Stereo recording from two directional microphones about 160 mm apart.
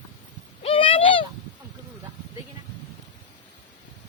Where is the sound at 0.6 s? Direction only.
35° left (ahead or behind).